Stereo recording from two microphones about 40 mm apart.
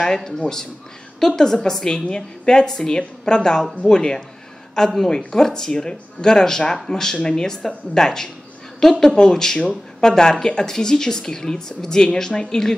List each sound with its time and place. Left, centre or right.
0.0 s a woman's voice: centre